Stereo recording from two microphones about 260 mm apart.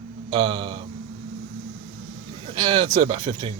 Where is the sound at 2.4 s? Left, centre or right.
Right.